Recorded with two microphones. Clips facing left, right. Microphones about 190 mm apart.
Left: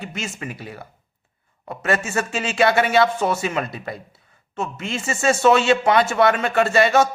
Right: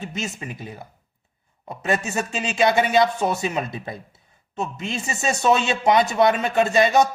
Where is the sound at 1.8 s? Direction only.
15° right (ahead or behind).